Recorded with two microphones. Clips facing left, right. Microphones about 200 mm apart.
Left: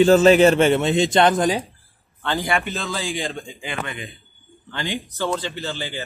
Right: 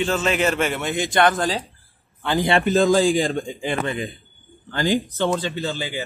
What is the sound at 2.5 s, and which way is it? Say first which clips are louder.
Speech: right 7 dB; 30° right (ahead or behind).